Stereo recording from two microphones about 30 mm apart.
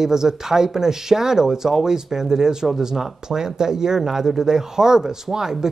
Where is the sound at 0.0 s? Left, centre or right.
Centre.